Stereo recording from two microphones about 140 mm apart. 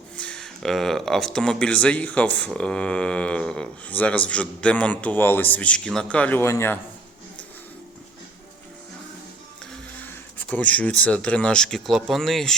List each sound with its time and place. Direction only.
0.2 s speech: 5° left (ahead or behind)
10.5 s speech: 10° left (ahead or behind)